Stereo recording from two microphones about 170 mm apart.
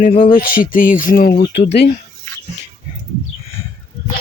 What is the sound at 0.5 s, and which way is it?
Music, 55° left (ahead or behind).